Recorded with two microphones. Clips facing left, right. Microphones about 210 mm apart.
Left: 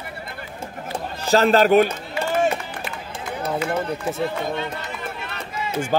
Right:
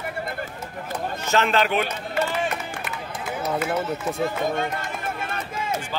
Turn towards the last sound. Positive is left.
turn(degrees=-50)  # may be behind; listen again after turning